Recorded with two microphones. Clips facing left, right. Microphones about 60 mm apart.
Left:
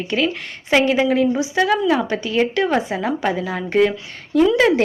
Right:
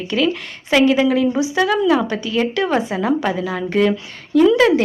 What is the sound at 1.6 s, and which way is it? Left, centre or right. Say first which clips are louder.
A woman's voice: right 1 dB; left.